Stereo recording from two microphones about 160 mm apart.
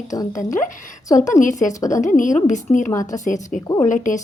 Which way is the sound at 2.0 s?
50° left (ahead or behind).